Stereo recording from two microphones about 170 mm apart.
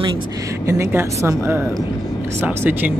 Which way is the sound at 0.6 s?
15° right (ahead or behind).